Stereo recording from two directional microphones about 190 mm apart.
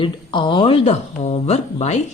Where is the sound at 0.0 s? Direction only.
25° left (ahead or behind).